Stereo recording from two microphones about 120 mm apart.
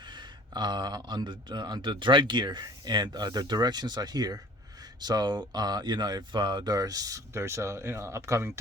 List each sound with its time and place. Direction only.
0.0 s speech: 40° right (ahead or behind); by 8.5 s 20° right (ahead or behind)